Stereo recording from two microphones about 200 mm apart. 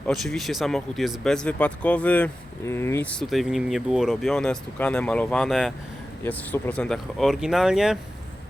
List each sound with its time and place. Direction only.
0.1 s speech: centre (ahead or behind)